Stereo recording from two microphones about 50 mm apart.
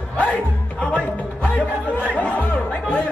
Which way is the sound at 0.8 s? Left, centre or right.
Left.